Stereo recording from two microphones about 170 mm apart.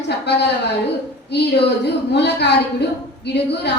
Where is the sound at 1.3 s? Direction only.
80° left.